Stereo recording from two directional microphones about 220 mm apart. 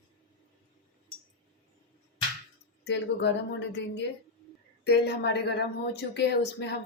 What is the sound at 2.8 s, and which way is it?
Speech, 50° left (ahead or behind).